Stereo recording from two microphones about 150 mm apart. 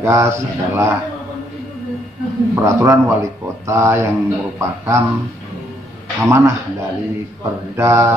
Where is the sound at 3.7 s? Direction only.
20° right (ahead or behind).